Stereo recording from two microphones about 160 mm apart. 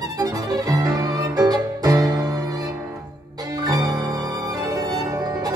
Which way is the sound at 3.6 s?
25° right (ahead or behind).